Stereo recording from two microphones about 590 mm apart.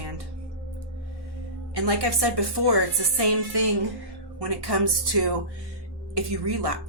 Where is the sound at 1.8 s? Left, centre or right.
Right.